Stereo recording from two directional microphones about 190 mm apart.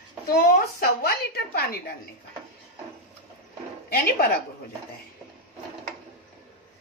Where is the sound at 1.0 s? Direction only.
55° left (ahead or behind).